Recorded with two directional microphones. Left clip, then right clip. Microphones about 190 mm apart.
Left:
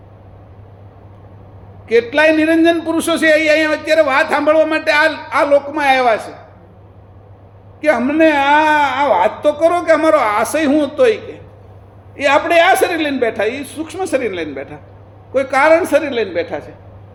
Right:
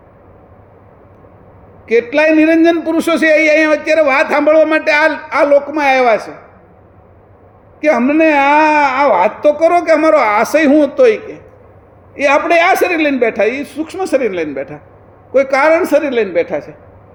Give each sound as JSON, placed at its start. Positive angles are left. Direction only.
{"t": 1.9, "sound": "a man's voice", "side_deg": -40}
{"t": 7.8, "sound": "a man's voice", "side_deg": -40}